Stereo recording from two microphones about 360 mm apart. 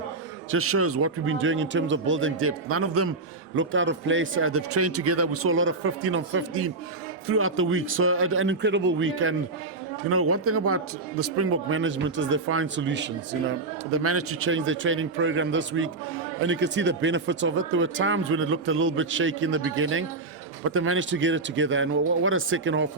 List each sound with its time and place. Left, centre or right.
0.5 s speech: right